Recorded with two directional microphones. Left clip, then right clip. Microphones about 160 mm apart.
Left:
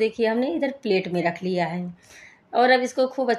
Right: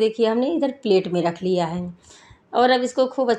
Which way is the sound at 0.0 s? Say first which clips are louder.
Right 3 dB; 10° right (ahead or behind).